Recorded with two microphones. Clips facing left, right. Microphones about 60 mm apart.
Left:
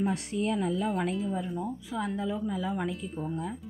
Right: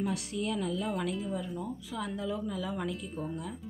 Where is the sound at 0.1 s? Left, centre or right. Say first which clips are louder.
Left 4 dB; left.